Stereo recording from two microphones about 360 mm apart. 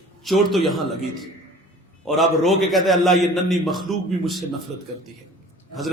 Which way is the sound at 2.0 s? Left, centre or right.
Centre.